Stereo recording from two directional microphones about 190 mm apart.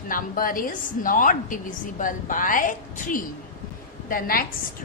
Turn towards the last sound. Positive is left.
turn(degrees=50)  # may be behind; listen again after turning